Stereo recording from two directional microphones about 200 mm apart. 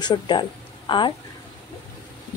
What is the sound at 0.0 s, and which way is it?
Speech, 20° left (ahead or behind).